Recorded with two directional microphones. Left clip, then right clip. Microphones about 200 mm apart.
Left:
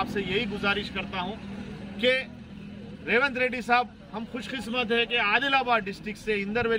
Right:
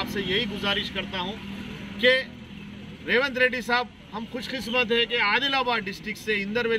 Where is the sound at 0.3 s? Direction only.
25° left (ahead or behind).